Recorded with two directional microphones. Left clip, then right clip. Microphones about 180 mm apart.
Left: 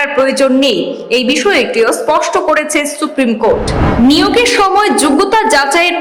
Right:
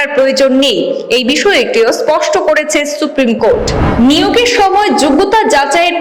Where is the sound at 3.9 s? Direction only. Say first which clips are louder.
Even; 5° right (ahead or behind).